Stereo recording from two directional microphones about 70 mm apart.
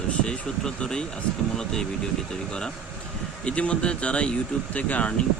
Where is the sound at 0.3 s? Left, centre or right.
Centre.